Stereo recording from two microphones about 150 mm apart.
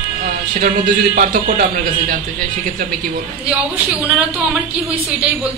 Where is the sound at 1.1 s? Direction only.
65° right (ahead or behind).